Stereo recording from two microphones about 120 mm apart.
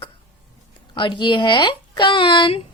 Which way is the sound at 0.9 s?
45° left (ahead or behind).